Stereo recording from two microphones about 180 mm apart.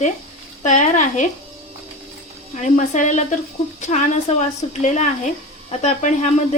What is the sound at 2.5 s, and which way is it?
A woman's voice, 40° left (ahead or behind).